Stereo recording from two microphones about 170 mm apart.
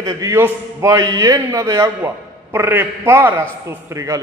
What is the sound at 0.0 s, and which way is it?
A man's voice, 20° right (ahead or behind).